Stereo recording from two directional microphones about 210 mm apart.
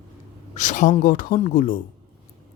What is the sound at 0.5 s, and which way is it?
Speech, 35° left (ahead or behind).